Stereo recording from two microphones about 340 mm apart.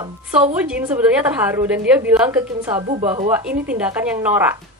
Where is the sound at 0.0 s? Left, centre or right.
Centre.